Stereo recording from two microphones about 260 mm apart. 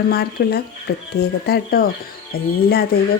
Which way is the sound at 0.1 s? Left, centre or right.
Left.